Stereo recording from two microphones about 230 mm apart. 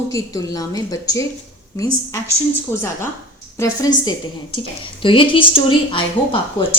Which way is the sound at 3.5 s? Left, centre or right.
Centre.